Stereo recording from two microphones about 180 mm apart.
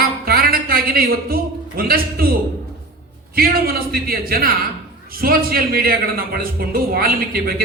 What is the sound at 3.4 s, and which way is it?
A man's voice, 60° right (ahead or behind).